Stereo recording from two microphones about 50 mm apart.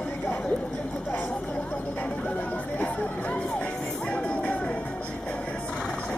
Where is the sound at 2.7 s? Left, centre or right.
Left.